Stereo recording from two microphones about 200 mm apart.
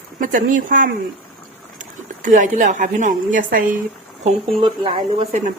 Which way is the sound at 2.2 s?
40° right (ahead or behind).